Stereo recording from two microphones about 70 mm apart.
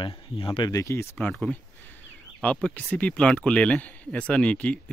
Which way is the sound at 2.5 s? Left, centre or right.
Centre.